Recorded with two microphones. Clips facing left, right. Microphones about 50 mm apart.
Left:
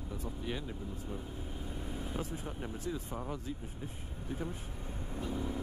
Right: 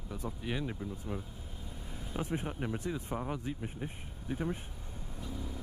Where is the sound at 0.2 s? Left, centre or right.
Right.